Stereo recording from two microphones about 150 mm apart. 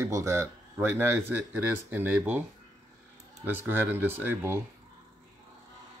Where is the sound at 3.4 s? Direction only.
15° right (ahead or behind).